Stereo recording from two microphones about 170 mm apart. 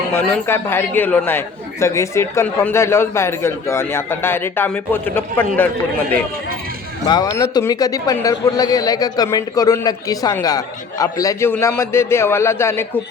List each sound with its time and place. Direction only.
0.1 s a man's voice: 15° left (ahead or behind)
7.1 s a man's voice: 20° left (ahead or behind)